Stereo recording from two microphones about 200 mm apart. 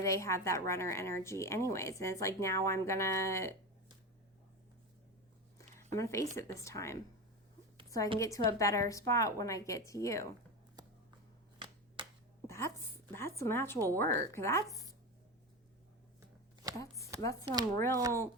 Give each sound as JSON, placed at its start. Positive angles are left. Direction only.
{"t": 0.0, "sound": "speech", "side_deg": 15}
{"t": 6.0, "sound": "a woman's voice", "side_deg": 15}
{"t": 12.5, "sound": "a woman's voice", "side_deg": 15}
{"t": 16.7, "sound": "chopping", "side_deg": 15}
{"t": 17.4, "sound": "speech", "side_deg": -20}
{"t": 17.7, "sound": "speech", "side_deg": 15}